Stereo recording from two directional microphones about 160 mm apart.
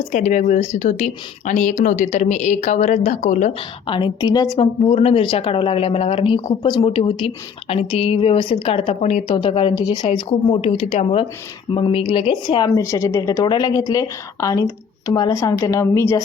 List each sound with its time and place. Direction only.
0.1 s a woman's voice: 50° left (ahead or behind)
3.8 s speech: 30° left (ahead or behind)